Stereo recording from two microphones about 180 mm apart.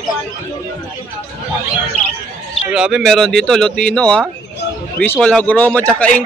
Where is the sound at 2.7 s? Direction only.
5° right (ahead or behind).